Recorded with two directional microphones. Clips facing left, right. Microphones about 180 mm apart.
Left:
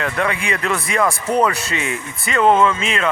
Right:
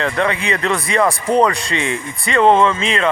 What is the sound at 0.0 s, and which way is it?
Speech, 25° right (ahead or behind).